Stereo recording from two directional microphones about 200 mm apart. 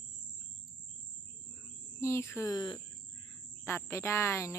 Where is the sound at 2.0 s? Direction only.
15° left (ahead or behind).